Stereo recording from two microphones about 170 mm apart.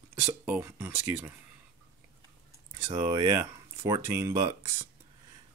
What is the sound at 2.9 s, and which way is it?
Speech, 20° right (ahead or behind).